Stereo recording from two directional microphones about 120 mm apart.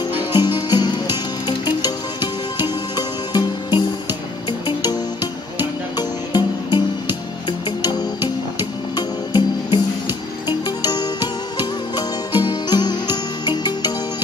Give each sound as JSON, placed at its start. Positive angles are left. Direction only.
{"t": 0.0, "sound": "music", "side_deg": 35}